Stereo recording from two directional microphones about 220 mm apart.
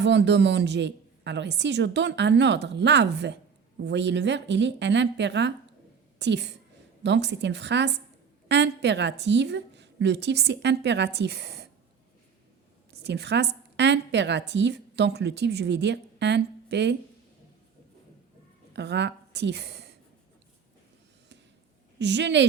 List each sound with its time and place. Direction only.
0.0 s a woman's voice: 50° right (ahead or behind)
12.9 s a woman's voice: 50° right (ahead or behind)
18.7 s a woman's voice: 50° right (ahead or behind)
21.9 s a woman's voice: 50° right (ahead or behind)